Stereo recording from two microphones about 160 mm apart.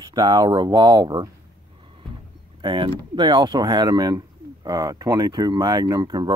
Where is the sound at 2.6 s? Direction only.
30° right (ahead or behind).